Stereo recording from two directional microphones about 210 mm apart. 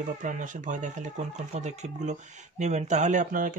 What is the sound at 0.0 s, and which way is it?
Speech, 40° right (ahead or behind).